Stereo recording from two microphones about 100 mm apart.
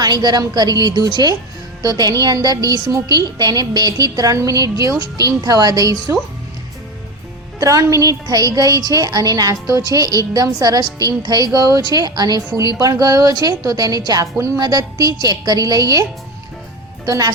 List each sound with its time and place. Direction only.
0.0 s a woman's voice: 45° right (ahead or behind)
7.6 s a woman's voice: 35° right (ahead or behind)
17.1 s a woman's voice: 40° right (ahead or behind)